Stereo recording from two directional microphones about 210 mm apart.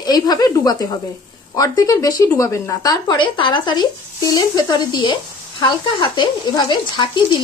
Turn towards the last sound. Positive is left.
turn(degrees=20)  # may be behind; listen again after turning